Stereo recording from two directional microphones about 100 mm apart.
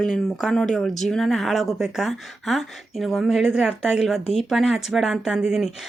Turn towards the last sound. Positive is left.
turn(degrees=-5)  # may be behind; listen again after turning